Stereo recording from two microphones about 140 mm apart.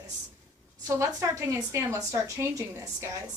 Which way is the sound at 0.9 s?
20° right (ahead or behind).